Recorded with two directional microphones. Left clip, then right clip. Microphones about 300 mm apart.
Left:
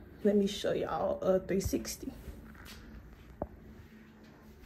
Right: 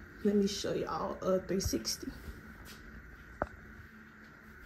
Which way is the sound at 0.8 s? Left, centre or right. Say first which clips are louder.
Left 4 dB; centre.